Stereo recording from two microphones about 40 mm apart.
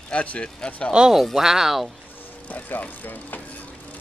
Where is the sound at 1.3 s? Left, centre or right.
Centre.